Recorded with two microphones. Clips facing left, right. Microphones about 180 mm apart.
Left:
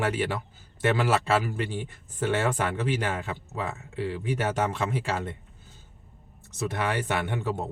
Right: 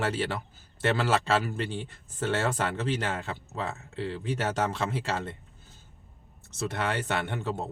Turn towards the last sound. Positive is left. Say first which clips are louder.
# left 2 dB
turn(degrees=10)  # may be behind; listen again after turning